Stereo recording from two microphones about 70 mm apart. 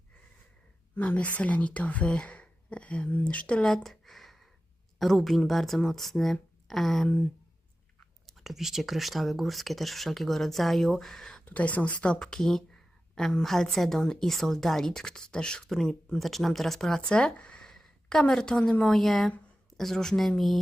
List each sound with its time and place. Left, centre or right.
0.9 s a woman's voice: left
3.8 s a sound: centre
4.9 s speech: centre
8.3 s speech: centre
11.4 s speech: left
12.1 s a woman's voice: centre